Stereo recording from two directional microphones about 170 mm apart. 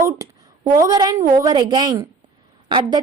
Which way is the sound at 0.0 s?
20° right (ahead or behind).